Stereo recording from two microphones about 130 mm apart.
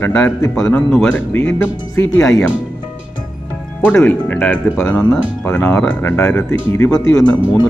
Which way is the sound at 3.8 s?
15° left (ahead or behind).